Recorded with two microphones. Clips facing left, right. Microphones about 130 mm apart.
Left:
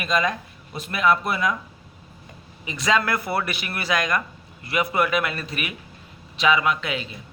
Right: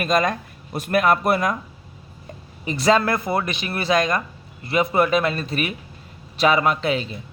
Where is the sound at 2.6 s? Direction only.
35° right (ahead or behind).